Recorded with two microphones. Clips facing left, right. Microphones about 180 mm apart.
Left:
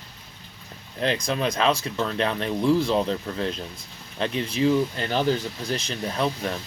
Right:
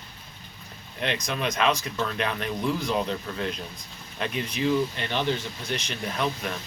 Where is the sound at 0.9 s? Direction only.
35° left (ahead or behind).